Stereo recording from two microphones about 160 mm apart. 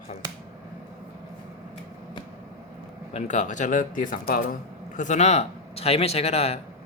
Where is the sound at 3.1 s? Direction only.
50° left (ahead or behind).